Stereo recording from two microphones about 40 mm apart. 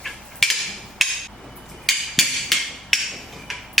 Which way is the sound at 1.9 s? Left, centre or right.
Centre.